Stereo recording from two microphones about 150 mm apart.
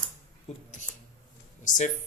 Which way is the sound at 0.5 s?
50° left (ahead or behind).